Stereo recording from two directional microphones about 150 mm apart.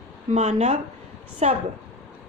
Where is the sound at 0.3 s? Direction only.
50° right (ahead or behind).